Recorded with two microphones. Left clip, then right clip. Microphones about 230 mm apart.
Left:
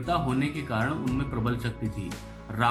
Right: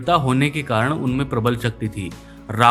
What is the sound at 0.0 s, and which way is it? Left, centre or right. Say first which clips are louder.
Speech: right 10 dB; right.